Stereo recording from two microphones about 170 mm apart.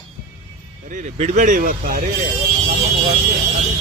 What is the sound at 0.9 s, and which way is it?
Speech, 45° right (ahead or behind).